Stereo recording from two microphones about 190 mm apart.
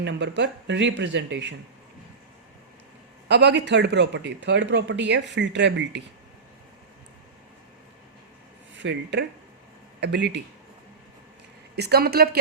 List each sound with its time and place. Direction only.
0.0 s speech: 70° right (ahead or behind)
3.2 s a man's voice: 65° right (ahead or behind)
8.7 s a man's voice: 70° right (ahead or behind)
11.8 s a man's voice: 55° right (ahead or behind)